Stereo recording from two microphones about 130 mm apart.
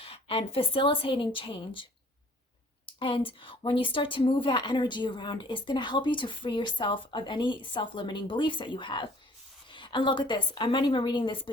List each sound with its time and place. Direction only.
0.0 s a woman's voice: 50° left (ahead or behind)